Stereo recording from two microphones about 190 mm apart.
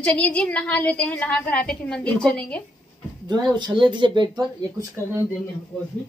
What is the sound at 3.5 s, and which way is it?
Speech, 25° right (ahead or behind).